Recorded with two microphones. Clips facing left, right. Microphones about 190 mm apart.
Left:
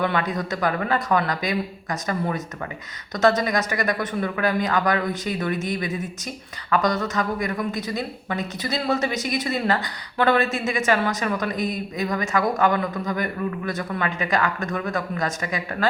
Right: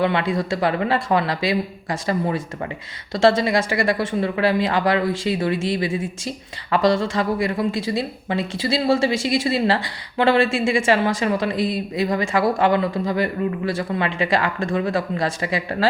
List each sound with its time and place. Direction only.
0.0 s speech: 25° right (ahead or behind)